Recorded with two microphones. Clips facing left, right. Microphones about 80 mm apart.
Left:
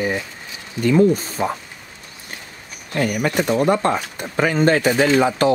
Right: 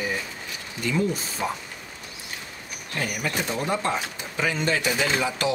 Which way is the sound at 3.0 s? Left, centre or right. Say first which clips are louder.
Left 9 dB; left.